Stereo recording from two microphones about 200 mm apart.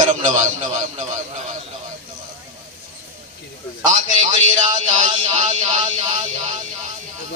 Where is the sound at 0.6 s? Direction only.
35° right (ahead or behind).